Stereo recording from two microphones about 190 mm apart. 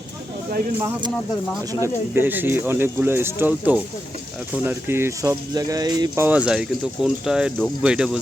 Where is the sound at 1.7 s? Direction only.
15° left (ahead or behind).